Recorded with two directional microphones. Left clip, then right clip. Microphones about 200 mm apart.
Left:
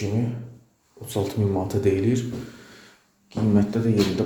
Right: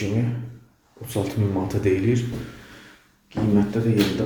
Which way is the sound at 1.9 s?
20° left (ahead or behind).